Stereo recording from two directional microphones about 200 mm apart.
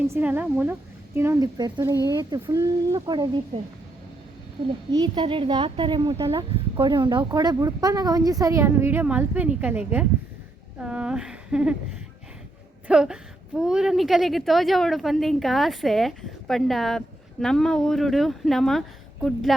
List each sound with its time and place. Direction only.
0.1 s a woman's voice: 10° right (ahead or behind)
4.9 s speech: 20° right (ahead or behind); by 11.8 s 5° right (ahead or behind)
12.9 s speech: 5° right (ahead or behind)